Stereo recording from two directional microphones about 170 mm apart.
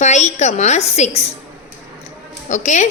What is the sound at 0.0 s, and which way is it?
A woman's voice, 45° left (ahead or behind).